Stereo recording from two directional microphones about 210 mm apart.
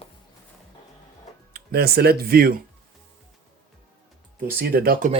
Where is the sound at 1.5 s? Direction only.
50° right (ahead or behind).